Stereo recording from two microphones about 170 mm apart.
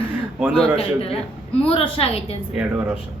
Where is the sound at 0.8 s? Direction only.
35° left (ahead or behind).